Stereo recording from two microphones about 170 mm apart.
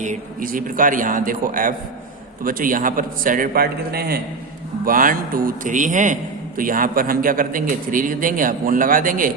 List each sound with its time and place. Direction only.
0.0 s a man's voice: 50° right (ahead or behind); by 4.2 s 65° right (ahead or behind)
4.9 s a man's voice: 55° right (ahead or behind)